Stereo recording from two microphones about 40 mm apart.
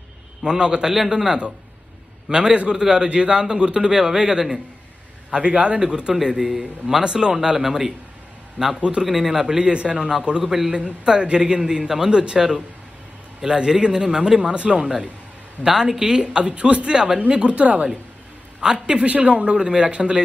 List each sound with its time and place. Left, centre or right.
0.5 s a man's voice: right
5.3 s a man's voice: right
7.4 s speech: centre
8.7 s a man's voice: right
9.0 s speech: centre
9.7 s a man's voice: right
10.4 s speech: centre
11.1 s a man's voice: right
18.9 s a woman's voice: right
19.5 s a man's voice: centre